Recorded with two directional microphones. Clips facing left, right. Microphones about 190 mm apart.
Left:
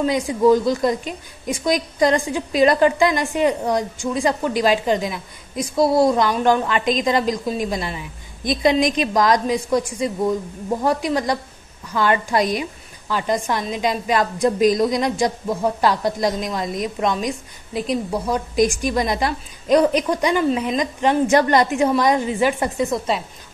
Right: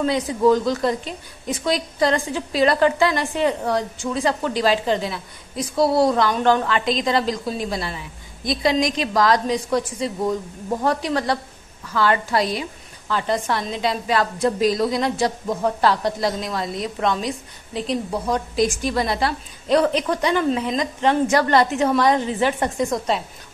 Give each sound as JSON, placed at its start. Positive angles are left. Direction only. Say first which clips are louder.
{"t": 0.0, "sound": "a woman's voice", "louder": "left 1 dB", "side_deg": 10}